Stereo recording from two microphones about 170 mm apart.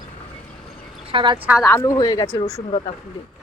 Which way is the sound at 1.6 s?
15° left (ahead or behind).